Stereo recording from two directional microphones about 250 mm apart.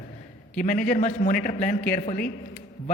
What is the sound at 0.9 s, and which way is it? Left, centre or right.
A man's voice, left.